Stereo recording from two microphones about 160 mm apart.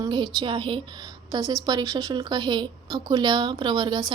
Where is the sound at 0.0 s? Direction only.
25° right (ahead or behind).